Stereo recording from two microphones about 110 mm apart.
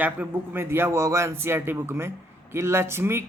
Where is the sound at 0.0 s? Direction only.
15° right (ahead or behind).